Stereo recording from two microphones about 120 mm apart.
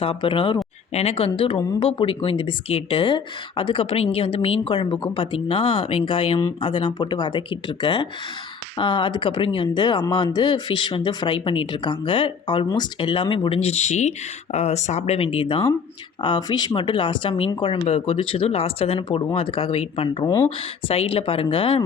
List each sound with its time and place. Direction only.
0.0 s speech: 50° left (ahead or behind)
0.9 s speech: 55° left (ahead or behind)
16.2 s speech: 40° left (ahead or behind); by 20.2 s 55° left (ahead or behind)
20.2 s speech: 25° left (ahead or behind)
20.8 s speech: 55° left (ahead or behind)